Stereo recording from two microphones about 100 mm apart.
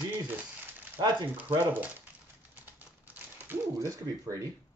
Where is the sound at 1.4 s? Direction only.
15° right (ahead or behind).